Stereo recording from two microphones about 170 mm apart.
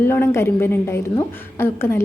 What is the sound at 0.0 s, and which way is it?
A woman's voice, 15° left (ahead or behind).